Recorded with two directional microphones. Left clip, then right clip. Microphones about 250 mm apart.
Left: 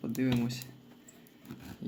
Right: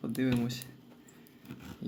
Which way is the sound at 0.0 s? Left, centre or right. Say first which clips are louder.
Even; centre.